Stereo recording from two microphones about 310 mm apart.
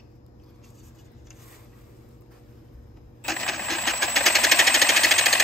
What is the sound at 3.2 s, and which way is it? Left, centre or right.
Coin, centre.